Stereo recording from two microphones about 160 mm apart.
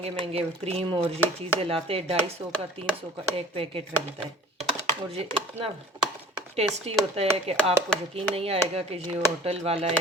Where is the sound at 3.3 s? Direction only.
35° right (ahead or behind).